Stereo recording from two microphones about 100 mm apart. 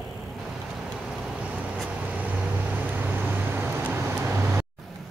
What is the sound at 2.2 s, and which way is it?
Vehicle, 15° right (ahead or behind).